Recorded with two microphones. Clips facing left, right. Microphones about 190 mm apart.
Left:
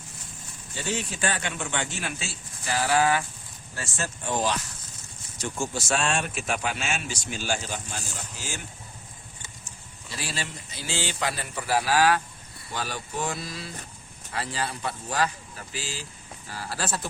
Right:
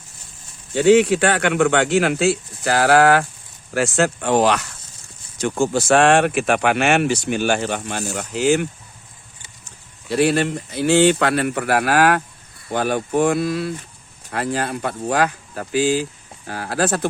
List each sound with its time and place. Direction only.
0.7 s speech: 75° right (ahead or behind)
3.8 s speech: 90° right; by 8.6 s 65° right (ahead or behind)
9.6 s speech: 60° right (ahead or behind)